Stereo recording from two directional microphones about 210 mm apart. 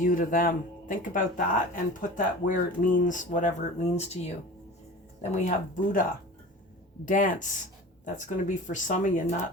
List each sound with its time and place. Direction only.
0.0 s speech: 40° left (ahead or behind)
5.3 s speech: 35° left (ahead or behind)